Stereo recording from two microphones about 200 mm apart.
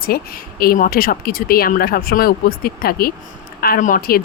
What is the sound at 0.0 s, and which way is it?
Speech, 45° left (ahead or behind).